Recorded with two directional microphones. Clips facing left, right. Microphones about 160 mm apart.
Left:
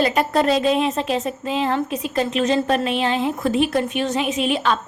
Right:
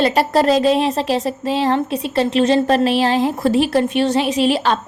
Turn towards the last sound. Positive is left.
turn(degrees=-35)  # may be behind; listen again after turning